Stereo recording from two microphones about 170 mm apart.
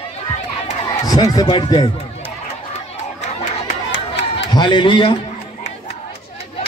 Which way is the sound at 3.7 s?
90° left.